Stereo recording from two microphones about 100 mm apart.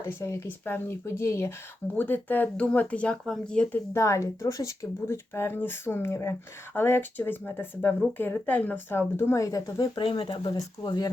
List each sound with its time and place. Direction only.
0.0 s speech: 25° left (ahead or behind)
2.0 s speech: 15° left (ahead or behind)
3.9 s speech: 30° left (ahead or behind)
9.9 s speech: 60° left (ahead or behind)